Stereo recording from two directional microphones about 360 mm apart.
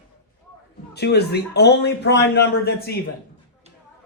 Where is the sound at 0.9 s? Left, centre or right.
Left.